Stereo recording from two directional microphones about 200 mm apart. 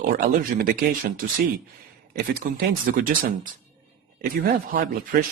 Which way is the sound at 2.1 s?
45° right (ahead or behind).